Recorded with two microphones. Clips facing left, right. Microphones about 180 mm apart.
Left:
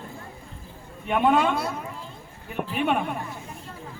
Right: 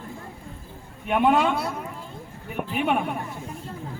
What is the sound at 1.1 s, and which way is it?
Speech, 10° right (ahead or behind).